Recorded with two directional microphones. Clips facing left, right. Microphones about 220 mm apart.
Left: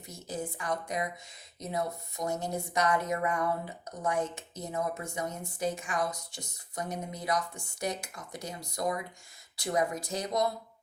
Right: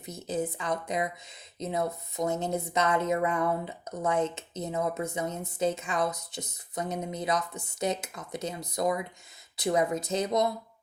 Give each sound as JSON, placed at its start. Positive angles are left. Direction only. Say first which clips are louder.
{"t": 0.0, "sound": "speech", "louder": "right 6 dB", "side_deg": -20}